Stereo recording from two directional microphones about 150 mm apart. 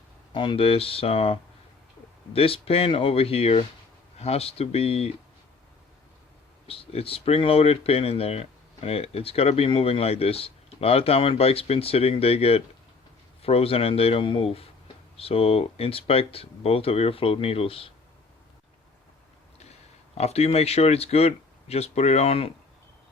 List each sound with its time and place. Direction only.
0.3 s speech: 35° left (ahead or behind)
6.7 s speech: 40° left (ahead or behind)
20.1 s speech: 45° left (ahead or behind)